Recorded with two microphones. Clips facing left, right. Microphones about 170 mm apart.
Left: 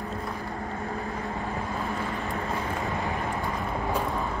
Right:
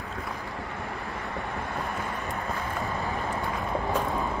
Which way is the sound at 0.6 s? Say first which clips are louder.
Left 3 dB; 75° right (ahead or behind).